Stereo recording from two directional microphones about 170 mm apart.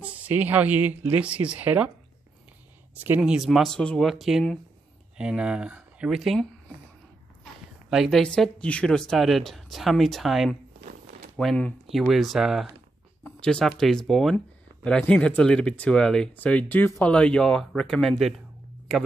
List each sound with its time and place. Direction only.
0.0 s speech: 10° right (ahead or behind)
3.0 s speech: 10° right (ahead or behind)
7.9 s speech: centre (ahead or behind)